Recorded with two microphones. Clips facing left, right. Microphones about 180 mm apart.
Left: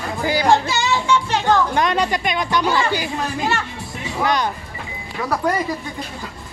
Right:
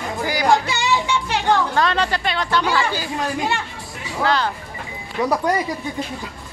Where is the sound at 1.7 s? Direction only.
15° left (ahead or behind).